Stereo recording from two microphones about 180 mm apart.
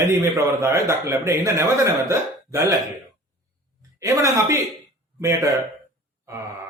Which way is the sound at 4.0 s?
20° right (ahead or behind).